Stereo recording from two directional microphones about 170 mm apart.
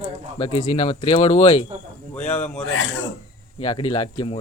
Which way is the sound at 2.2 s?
10° left (ahead or behind).